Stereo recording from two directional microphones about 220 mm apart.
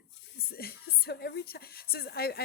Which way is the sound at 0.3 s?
45° left (ahead or behind).